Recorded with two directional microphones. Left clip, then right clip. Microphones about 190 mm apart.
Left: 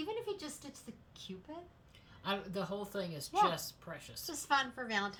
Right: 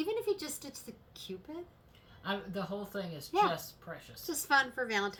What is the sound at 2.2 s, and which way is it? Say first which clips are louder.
Speech: right 1 dB; 35° left (ahead or behind).